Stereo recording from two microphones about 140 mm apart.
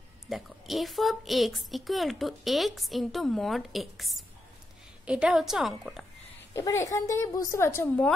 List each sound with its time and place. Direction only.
0.3 s a woman's voice: centre (ahead or behind)
6.5 s a woman's voice: 20° left (ahead or behind)